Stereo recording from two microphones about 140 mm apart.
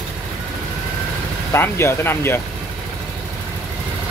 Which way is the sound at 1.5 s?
15° left (ahead or behind).